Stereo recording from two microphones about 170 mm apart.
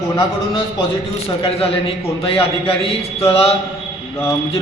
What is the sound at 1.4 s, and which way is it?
Mantra, 35° left (ahead or behind).